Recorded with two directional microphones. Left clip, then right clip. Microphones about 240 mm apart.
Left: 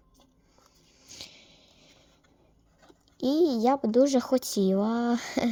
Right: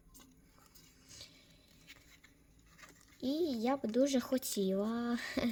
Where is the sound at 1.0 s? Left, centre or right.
Left.